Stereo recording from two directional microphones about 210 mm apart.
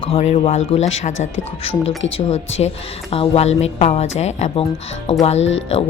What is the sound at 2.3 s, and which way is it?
Speech, 30° left (ahead or behind).